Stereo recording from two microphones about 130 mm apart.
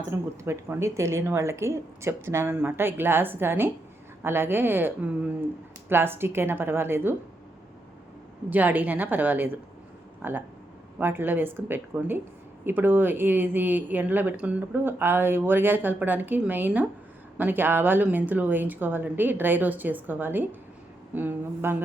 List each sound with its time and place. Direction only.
0.0 s speech: 20° right (ahead or behind)
8.4 s speech: 15° right (ahead or behind)